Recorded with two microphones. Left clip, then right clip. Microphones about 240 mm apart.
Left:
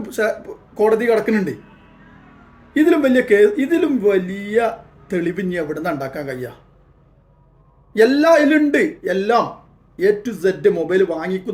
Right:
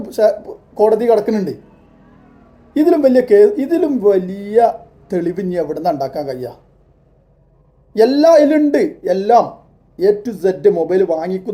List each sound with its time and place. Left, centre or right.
0.0 s a man's voice: centre
2.7 s a man's voice: centre
8.1 s a man's voice: centre